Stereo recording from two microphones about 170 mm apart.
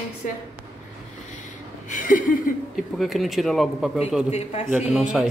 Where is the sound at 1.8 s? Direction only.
50° left (ahead or behind).